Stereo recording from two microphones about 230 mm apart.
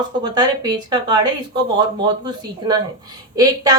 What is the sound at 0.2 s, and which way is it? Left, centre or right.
A woman's voice, centre.